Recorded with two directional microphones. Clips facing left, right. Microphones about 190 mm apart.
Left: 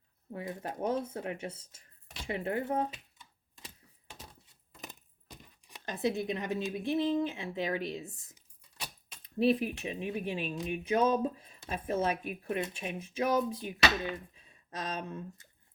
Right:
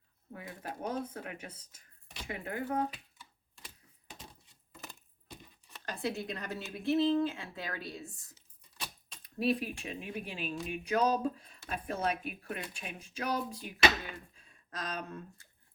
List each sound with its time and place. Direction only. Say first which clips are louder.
0.3 s speech: left 5 dB; 20° left (ahead or behind)
5.6 s speech: left 4 dB; 15° left (ahead or behind)